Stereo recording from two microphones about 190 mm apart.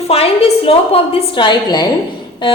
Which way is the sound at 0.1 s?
30° left (ahead or behind).